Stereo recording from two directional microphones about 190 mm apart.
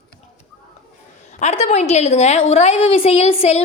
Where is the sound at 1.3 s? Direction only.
35° left (ahead or behind).